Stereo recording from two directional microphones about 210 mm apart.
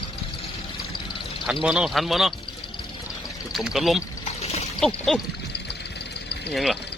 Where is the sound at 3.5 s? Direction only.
Centre (ahead or behind).